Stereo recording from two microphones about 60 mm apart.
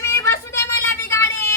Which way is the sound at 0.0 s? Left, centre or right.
Left.